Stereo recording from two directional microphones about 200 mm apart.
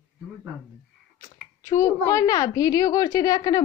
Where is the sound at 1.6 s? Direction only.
15° left (ahead or behind).